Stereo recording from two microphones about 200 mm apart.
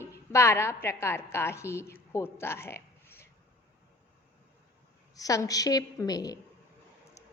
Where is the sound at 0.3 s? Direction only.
15° left (ahead or behind).